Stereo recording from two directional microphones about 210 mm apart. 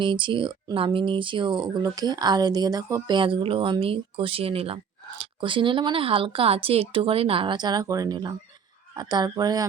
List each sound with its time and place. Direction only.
0.0 s speech: 25° right (ahead or behind)